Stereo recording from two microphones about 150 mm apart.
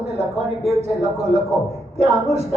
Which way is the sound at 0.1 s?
45° right (ahead or behind).